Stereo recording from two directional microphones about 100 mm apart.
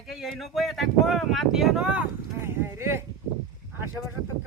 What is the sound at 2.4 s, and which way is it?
Speech, 25° right (ahead or behind).